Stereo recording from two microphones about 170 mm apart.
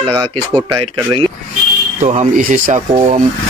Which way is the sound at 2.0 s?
45° right (ahead or behind).